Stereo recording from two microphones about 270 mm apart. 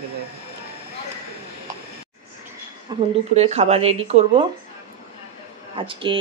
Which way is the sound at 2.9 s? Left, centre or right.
Centre.